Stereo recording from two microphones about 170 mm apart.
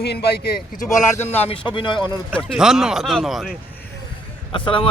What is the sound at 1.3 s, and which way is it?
Speech, 35° left (ahead or behind).